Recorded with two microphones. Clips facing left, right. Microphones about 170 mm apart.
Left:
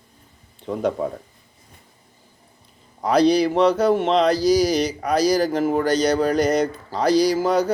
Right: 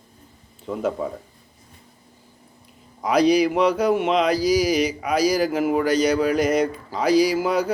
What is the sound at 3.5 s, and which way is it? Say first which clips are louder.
Speech: left 2 dB; 10° right (ahead or behind).